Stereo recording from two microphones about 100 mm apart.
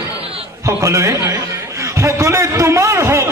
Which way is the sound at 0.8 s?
30° right (ahead or behind).